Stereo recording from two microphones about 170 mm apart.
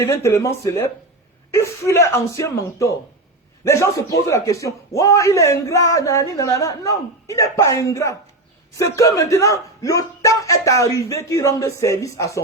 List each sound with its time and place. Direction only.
0.0 s a man's voice: 15° left (ahead or behind)